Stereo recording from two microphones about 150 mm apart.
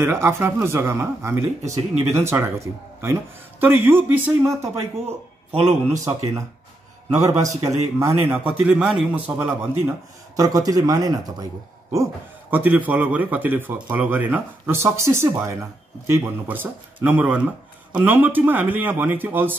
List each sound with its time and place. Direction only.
0.0 s a man's voice: 15° right (ahead or behind)
10.3 s a man's voice: 20° right (ahead or behind)